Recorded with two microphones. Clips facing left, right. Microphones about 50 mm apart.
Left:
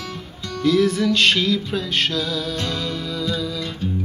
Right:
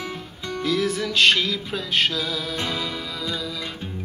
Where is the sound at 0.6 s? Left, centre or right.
Centre.